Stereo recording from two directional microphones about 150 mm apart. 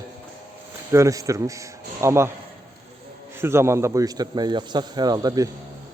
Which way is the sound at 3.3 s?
15° right (ahead or behind).